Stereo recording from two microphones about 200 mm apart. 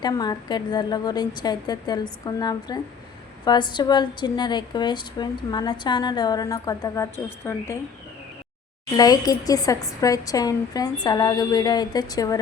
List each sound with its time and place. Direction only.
0.0 s speech: 20° left (ahead or behind)
9.0 s a woman's voice: 20° left (ahead or behind)